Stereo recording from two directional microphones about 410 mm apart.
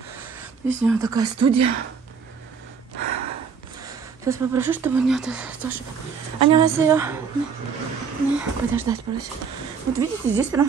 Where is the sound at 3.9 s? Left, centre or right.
Centre.